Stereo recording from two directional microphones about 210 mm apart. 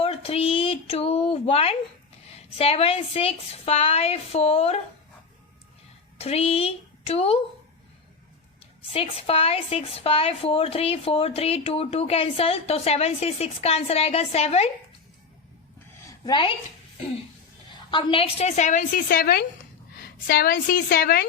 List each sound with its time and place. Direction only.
0.0 s a woman's voice: 25° left (ahead or behind)
6.1 s speech: 30° left (ahead or behind)
8.9 s a woman's voice: 25° left (ahead or behind)
16.2 s a woman's voice: 25° left (ahead or behind)
17.7 s a woman's voice: 25° left (ahead or behind); by 21.2 s 45° left (ahead or behind)